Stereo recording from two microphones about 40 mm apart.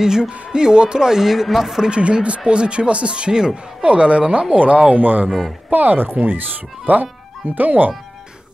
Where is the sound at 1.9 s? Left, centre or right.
Right.